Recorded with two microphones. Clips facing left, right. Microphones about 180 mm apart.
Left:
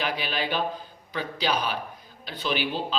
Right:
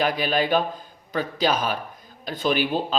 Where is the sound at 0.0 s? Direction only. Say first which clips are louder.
Right 7 dB; 45° right (ahead or behind).